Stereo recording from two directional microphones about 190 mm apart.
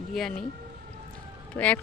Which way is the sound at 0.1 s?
Centre (ahead or behind).